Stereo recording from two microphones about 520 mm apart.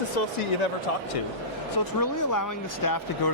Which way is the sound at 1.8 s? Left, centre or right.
Left.